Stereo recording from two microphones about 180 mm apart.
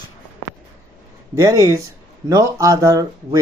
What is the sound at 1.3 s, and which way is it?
Speech, 15° right (ahead or behind).